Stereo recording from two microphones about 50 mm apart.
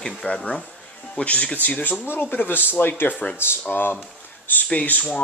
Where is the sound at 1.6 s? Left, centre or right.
Left.